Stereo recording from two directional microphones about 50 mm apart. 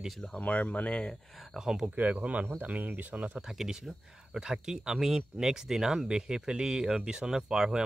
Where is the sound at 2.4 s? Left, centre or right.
Right.